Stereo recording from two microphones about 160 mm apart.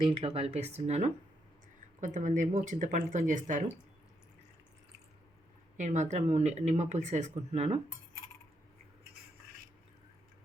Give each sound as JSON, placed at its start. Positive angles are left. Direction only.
{"t": 0.0, "sound": "speech", "side_deg": -35}
{"t": 5.7, "sound": "speech", "side_deg": -50}